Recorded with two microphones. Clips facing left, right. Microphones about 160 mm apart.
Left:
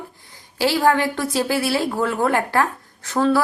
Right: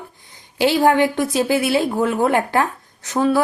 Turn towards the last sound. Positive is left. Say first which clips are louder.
# right 1 dB
turn(degrees=-20)  # may be behind; listen again after turning